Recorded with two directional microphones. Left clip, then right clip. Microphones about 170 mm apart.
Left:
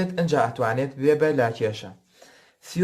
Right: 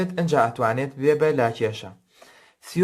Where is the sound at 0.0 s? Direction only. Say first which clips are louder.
Right 2 dB; 35° right (ahead or behind).